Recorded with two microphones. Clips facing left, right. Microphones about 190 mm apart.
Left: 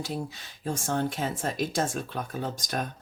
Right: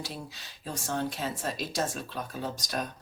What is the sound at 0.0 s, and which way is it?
Speech, 50° left (ahead or behind).